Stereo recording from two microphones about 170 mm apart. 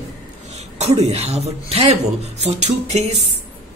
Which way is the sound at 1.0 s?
40° right (ahead or behind).